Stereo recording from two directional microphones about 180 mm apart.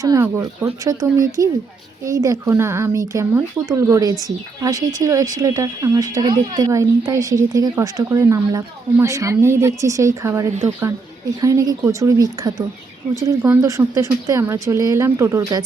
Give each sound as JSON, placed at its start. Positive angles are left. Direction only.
{"t": 0.0, "sound": "speech", "side_deg": -15}
{"t": 11.4, "sound": "speech", "side_deg": -20}